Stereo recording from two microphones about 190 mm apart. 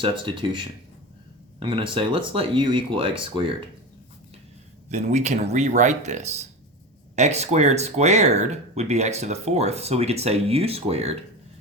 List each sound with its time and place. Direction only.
0.0 s speech: 25° right (ahead or behind)
4.9 s speech: 35° right (ahead or behind)